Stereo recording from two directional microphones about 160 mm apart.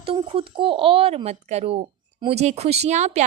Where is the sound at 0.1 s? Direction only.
35° right (ahead or behind).